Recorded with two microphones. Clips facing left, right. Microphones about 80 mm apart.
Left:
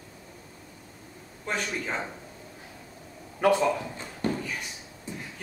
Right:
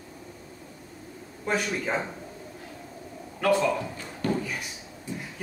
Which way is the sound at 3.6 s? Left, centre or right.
Left.